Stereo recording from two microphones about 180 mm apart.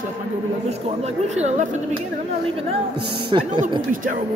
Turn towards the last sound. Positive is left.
turn(degrees=-25)  # may be behind; listen again after turning